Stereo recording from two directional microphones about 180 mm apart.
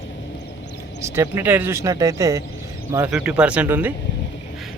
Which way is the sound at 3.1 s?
5° right (ahead or behind).